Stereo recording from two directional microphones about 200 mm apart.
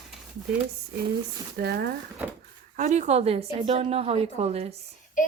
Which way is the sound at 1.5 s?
55° right (ahead or behind).